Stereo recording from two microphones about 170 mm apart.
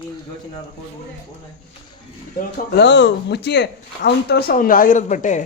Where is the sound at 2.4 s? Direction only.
70° left (ahead or behind); by 5.4 s 45° left (ahead or behind).